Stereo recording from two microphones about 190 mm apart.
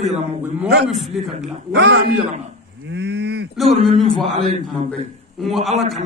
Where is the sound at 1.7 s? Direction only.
65° right (ahead or behind).